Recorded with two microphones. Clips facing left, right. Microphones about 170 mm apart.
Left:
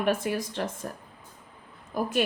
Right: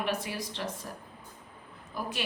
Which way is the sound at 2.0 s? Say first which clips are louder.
Left 7 dB; 45° left (ahead or behind).